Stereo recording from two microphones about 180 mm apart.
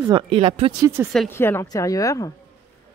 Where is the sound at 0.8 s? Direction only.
15° right (ahead or behind).